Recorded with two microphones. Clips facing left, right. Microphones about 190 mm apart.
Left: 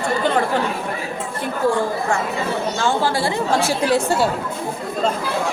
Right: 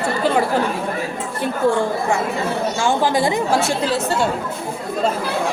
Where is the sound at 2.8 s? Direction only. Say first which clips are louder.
Right 3 dB; 15° right (ahead or behind).